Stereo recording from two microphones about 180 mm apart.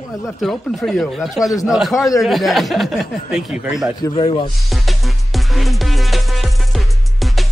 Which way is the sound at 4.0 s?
20° left (ahead or behind).